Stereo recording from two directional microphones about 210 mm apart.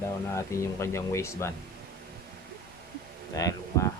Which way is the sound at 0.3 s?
15° left (ahead or behind).